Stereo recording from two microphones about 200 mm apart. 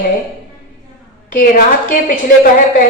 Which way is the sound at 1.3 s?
45° left (ahead or behind).